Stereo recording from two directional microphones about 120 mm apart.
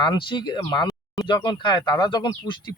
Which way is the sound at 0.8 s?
30° left (ahead or behind).